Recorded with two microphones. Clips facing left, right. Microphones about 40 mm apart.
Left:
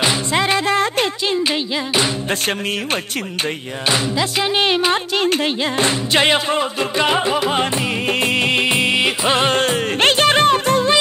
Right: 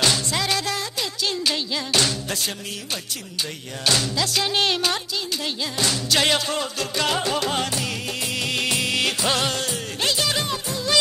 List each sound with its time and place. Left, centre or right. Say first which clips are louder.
0.0 s music: left 5 dB; left
3.9 s music: left 5 dB; left
5.1 s music: left 10 dB; left
8.1 s music: left 12 dB; left